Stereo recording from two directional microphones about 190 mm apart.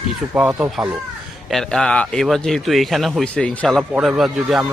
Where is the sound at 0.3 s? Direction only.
5° right (ahead or behind).